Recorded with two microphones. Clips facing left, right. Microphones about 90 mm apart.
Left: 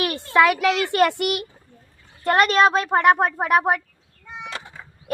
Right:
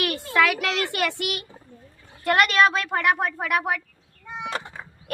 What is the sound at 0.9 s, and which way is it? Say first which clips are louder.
Speech: left 8 dB; 50° left (ahead or behind).